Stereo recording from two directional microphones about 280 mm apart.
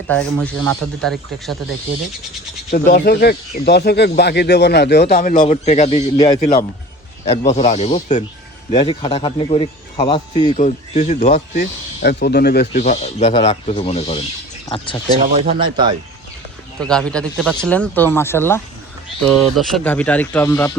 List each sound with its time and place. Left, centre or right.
0.1 s speech: centre
2.6 s speech: left; by 15.2 s centre
15.3 s speech: right
16.8 s speech: centre